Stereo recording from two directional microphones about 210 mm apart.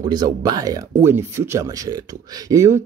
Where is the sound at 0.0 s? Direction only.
20° right (ahead or behind).